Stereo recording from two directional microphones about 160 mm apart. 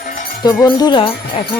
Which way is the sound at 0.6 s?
30° left (ahead or behind).